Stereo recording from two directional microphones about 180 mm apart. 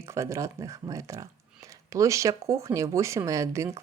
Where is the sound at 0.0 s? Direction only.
15° right (ahead or behind).